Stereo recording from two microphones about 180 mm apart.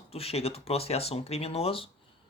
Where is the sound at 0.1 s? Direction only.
35° left (ahead or behind).